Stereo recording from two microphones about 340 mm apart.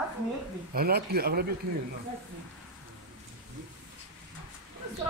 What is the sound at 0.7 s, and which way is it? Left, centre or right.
Speech, right.